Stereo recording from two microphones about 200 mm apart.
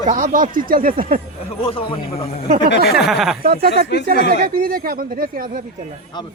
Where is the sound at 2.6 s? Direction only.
55° left (ahead or behind).